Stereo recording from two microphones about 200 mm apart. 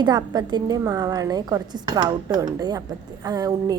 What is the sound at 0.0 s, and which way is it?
A woman's voice, 20° right (ahead or behind).